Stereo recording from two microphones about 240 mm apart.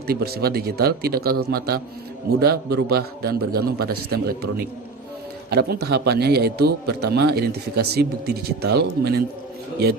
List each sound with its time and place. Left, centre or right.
0.1 s a man's voice: right